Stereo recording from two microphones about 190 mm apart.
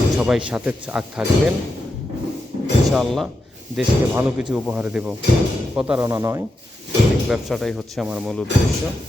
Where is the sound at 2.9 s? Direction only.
Centre (ahead or behind); by 6.4 s 15° right (ahead or behind).